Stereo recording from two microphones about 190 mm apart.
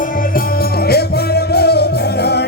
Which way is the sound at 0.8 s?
55° left (ahead or behind).